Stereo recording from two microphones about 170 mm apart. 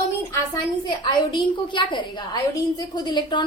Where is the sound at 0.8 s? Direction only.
25° left (ahead or behind).